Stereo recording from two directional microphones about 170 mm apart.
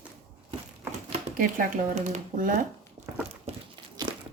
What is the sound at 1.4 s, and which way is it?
Speech, 50° right (ahead or behind).